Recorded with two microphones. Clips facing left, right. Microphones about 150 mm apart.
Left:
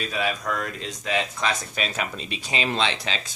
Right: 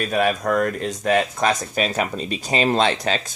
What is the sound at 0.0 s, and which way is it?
Speech, 50° right (ahead or behind).